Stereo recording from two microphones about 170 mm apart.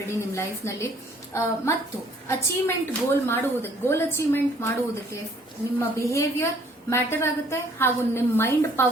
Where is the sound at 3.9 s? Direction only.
15° left (ahead or behind).